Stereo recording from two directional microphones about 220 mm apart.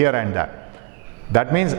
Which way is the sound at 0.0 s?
15° right (ahead or behind).